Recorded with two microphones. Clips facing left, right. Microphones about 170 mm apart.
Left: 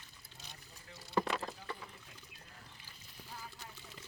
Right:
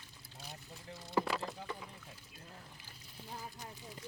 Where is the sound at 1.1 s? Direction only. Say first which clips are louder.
Even; 5° right (ahead or behind).